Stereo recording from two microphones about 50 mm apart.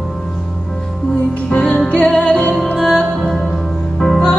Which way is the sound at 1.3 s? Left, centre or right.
Left.